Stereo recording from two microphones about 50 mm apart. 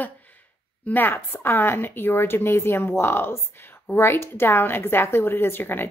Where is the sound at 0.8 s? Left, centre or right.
Left.